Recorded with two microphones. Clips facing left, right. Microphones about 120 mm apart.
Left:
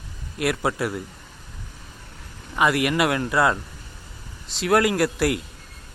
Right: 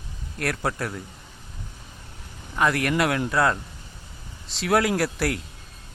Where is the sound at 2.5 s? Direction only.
5° left (ahead or behind).